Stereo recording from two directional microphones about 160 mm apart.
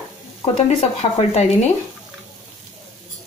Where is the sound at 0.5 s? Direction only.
40° left (ahead or behind).